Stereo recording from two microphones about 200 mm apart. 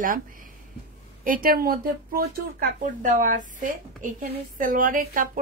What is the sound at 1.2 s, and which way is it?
Speech, 45° right (ahead or behind).